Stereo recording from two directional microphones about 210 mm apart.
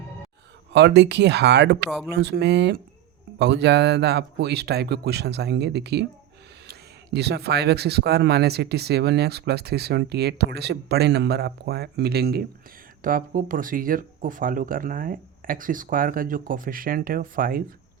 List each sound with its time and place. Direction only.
0.7 s speech: 55° right (ahead or behind)